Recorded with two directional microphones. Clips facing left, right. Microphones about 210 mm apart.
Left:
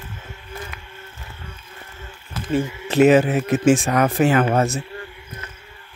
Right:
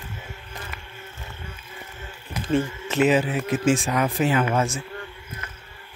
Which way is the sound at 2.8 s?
45° left (ahead or behind).